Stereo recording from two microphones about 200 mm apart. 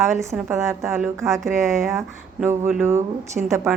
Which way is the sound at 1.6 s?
Centre (ahead or behind).